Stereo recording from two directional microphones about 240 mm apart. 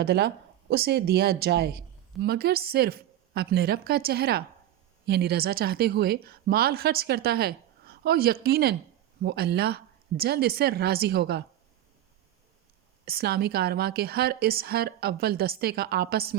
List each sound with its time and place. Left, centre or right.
0.0 s a woman's voice: right
13.1 s a woman's voice: right